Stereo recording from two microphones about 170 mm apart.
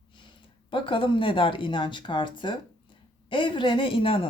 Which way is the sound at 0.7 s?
30° left (ahead or behind).